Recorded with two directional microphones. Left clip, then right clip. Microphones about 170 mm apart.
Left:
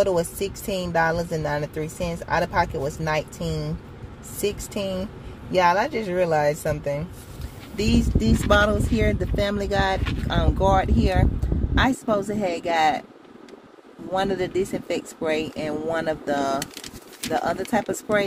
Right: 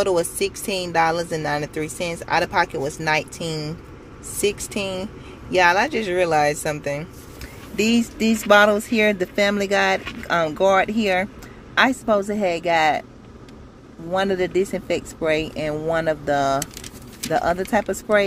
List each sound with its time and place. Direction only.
0.0 s speech: 5° left (ahead or behind)
7.8 s speech: 15° right (ahead or behind)
14.1 s speech: 15° right (ahead or behind)